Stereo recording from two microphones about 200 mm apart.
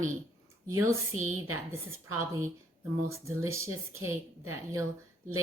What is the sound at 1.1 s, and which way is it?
Speech, 90° right.